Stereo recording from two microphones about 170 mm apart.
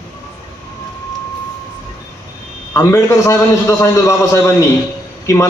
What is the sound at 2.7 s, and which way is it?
A man's voice, 15° left (ahead or behind).